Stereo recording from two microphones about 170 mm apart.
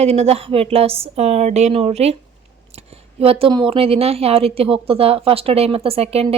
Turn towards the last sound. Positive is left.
turn(degrees=-35)  # may be behind; listen again after turning